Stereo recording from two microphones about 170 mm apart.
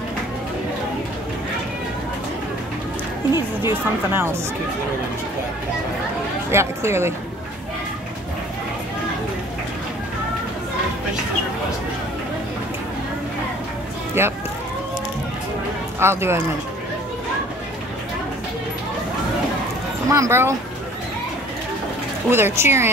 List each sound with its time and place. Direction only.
3.6 s speech: 15° right (ahead or behind)
6.5 s speech: 15° right (ahead or behind)
14.2 s speech: 15° right (ahead or behind)
16.0 s speech: 15° right (ahead or behind)
20.1 s speech: 15° right (ahead or behind)
22.3 s speech: 15° right (ahead or behind)